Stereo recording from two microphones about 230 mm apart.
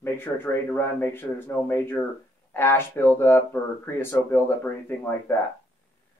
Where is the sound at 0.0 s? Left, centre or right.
Centre.